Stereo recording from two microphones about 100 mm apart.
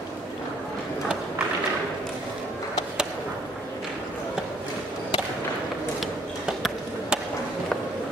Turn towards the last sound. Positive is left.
turn(degrees=-5)  # may be behind; listen again after turning